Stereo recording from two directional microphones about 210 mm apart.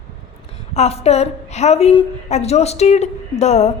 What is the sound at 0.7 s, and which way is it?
A woman's voice, 30° left (ahead or behind).